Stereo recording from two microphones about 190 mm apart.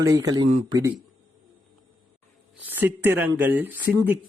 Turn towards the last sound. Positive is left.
turn(degrees=-10)  # may be behind; listen again after turning